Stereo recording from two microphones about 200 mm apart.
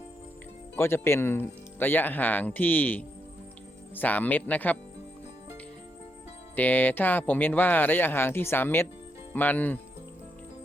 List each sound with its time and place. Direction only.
0.8 s speech: 10° left (ahead or behind)
6.6 s speech: 10° left (ahead or behind)